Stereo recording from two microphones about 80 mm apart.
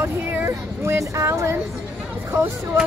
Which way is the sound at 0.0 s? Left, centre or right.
Right.